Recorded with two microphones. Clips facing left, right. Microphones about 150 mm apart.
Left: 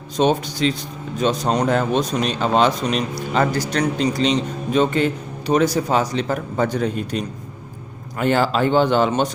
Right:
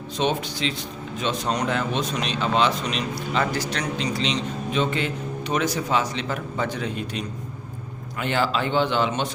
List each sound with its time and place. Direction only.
0.2 s speech: 40° left (ahead or behind)